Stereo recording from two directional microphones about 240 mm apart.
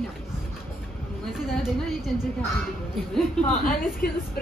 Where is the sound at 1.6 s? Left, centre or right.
Centre.